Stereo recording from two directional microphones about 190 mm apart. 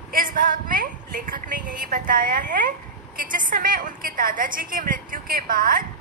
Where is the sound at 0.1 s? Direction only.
45° right (ahead or behind).